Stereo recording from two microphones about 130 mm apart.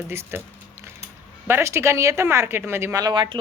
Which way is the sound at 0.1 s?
20° right (ahead or behind).